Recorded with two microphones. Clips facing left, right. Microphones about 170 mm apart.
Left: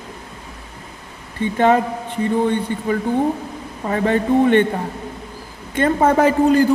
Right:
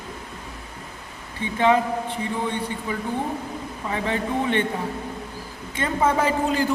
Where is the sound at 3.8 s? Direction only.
50° left (ahead or behind).